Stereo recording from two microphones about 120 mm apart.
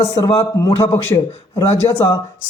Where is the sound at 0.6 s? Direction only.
25° left (ahead or behind).